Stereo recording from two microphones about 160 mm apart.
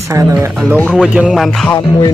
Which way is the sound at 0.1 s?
20° right (ahead or behind).